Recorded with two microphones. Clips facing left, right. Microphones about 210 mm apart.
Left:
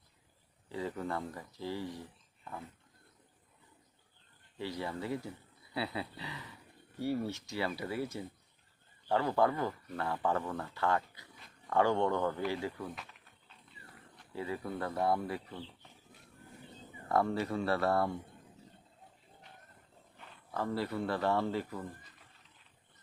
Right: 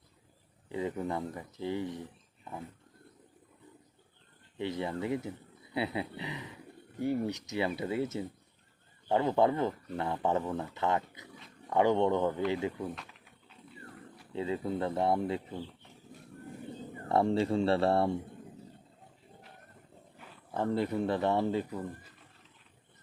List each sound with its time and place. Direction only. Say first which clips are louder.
0.7 s speech: right 3 dB; 20° right (ahead or behind)
4.5 s speech: right 4 dB; 20° right (ahead or behind)
14.3 s speech: right 5 dB; 20° right (ahead or behind)
17.1 s speech: right 4 dB; 25° right (ahead or behind)
20.5 s speech: right 5 dB; 20° right (ahead or behind)